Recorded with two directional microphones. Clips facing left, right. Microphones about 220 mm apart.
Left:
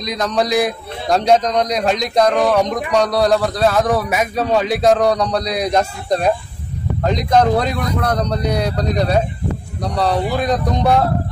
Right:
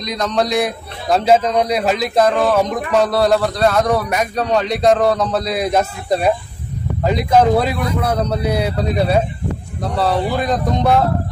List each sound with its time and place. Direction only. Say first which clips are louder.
0.0 s a man's voice: even; centre (ahead or behind)